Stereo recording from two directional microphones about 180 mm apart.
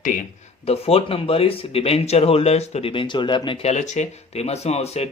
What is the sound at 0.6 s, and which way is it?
Speech, 35° left (ahead or behind).